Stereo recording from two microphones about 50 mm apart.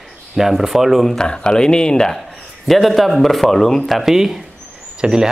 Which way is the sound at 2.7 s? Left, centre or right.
Centre.